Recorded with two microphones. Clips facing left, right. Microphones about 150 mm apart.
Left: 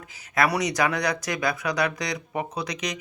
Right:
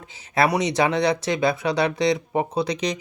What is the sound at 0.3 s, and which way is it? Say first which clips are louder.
Speech: right 3 dB; 25° right (ahead or behind).